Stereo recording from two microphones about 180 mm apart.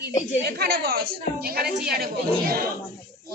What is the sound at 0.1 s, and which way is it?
Speech, 40° left (ahead or behind).